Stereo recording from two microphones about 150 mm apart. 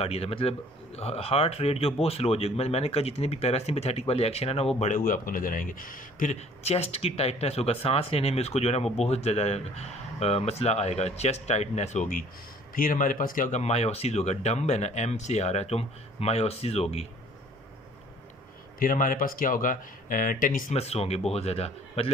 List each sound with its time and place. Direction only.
0.0 s speech: 40° left (ahead or behind)
4.7 s speech: 55° left (ahead or behind)
6.6 s speech: 40° left (ahead or behind); by 13.6 s 65° left (ahead or behind)
13.6 s speech: 45° left (ahead or behind)
18.8 s speech: 65° left (ahead or behind)
20.7 s speech: 45° left (ahead or behind)